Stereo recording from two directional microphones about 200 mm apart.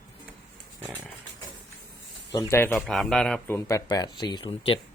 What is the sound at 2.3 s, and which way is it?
Speech, 15° left (ahead or behind).